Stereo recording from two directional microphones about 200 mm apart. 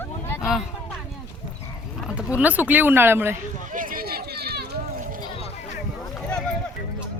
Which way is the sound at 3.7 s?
45° right (ahead or behind).